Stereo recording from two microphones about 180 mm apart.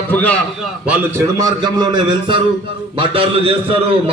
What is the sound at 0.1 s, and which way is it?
Speech, 10° left (ahead or behind).